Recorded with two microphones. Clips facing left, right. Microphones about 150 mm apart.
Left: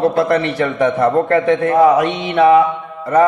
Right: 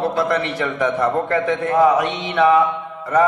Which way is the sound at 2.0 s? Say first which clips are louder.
Left 4 dB; 35° left (ahead or behind).